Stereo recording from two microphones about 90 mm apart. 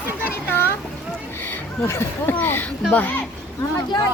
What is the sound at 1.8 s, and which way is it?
Speech, 25° left (ahead or behind).